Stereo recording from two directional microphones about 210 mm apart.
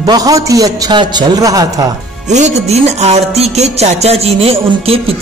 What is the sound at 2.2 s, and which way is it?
Music, 35° right (ahead or behind).